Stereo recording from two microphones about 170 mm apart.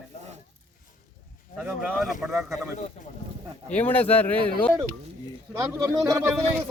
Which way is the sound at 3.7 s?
10° left (ahead or behind).